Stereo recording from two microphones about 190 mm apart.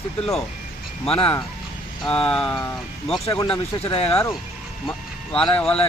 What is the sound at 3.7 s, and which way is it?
Speech, 30° left (ahead or behind).